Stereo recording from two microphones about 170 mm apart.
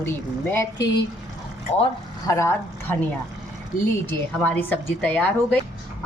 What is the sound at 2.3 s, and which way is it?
Speech, 15° left (ahead or behind).